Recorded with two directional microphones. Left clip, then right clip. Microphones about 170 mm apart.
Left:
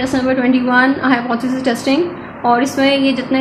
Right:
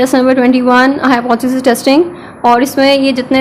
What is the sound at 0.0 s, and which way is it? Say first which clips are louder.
A woman's voice: right 7 dB; 50° right (ahead or behind).